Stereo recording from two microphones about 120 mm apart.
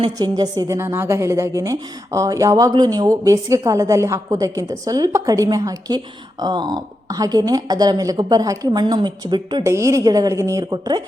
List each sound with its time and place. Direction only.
0.2 s a woman's voice: 35° right (ahead or behind)
9.6 s a woman's voice: 25° right (ahead or behind)